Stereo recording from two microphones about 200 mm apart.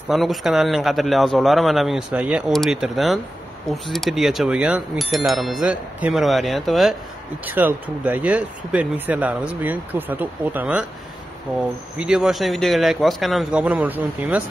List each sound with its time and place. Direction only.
0.1 s a man's voice: centre (ahead or behind)
12.0 s a man's voice: 5° right (ahead or behind)